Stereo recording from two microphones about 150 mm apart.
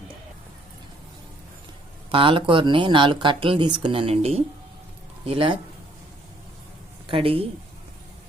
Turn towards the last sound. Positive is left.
turn(degrees=-35)  # may be behind; listen again after turning